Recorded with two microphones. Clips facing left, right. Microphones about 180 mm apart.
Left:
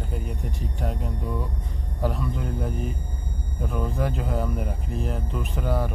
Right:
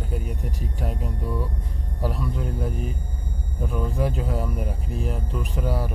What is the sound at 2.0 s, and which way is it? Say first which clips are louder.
Speech: even; centre (ahead or behind).